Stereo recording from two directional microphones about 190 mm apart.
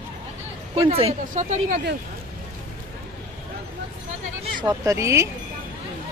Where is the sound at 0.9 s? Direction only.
35° right (ahead or behind).